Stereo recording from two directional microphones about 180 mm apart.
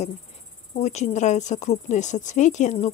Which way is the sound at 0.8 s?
40° left (ahead or behind).